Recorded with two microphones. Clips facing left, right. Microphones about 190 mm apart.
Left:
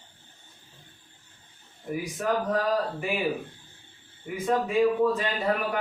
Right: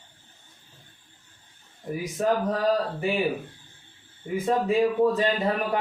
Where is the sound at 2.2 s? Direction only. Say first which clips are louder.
Right 4 dB; 35° right (ahead or behind).